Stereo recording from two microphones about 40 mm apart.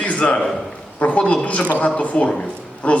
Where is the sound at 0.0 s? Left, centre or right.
Left.